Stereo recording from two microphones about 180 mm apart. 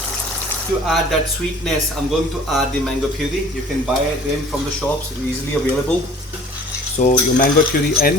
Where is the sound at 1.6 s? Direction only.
Centre (ahead or behind).